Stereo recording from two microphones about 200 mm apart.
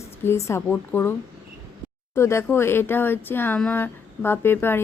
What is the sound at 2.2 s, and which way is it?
Speech, 15° left (ahead or behind).